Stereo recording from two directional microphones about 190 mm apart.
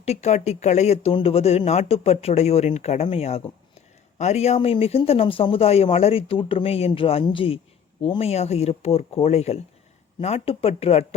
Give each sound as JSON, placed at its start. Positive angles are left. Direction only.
{"t": 0.0, "sound": "speech", "side_deg": 35}